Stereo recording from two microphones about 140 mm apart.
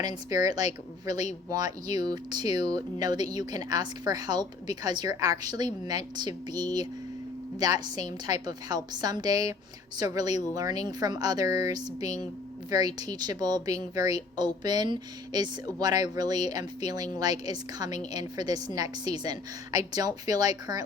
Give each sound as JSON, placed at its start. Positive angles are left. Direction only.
{"t": 0.3, "sound": "a woman's voice", "side_deg": -25}